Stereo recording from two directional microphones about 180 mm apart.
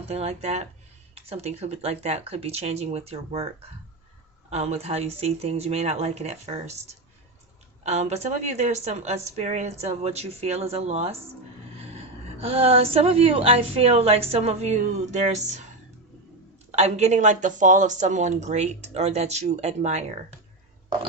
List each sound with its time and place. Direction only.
0.1 s a woman's voice: 35° right (ahead or behind)
7.9 s a woman's voice: 40° right (ahead or behind)
16.7 s a woman's voice: 35° right (ahead or behind)